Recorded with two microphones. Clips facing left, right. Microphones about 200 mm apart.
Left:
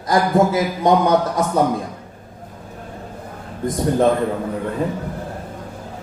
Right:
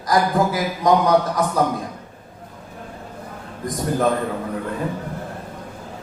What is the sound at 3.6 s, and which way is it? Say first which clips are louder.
Speech: left 4 dB; 25° left (ahead or behind).